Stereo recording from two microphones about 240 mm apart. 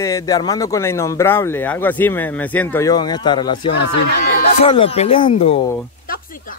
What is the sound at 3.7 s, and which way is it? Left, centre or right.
Speech, left.